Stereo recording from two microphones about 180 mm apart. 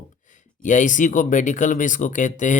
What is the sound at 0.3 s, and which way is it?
Speech, 45° left (ahead or behind).